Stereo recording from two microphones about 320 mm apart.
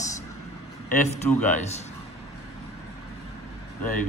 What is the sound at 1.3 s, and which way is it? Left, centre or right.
Speech, centre.